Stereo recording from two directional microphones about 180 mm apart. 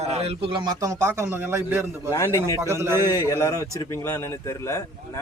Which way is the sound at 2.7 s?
15° right (ahead or behind).